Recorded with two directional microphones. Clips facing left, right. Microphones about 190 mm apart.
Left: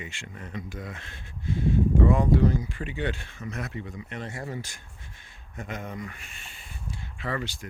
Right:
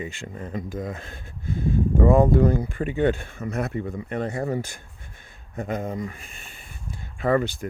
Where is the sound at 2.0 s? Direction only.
50° right (ahead or behind).